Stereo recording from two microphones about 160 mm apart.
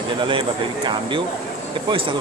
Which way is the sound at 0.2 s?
30° right (ahead or behind).